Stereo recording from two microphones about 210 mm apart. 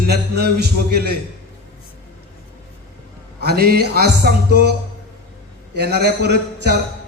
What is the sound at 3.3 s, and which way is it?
A man's voice, 50° right (ahead or behind).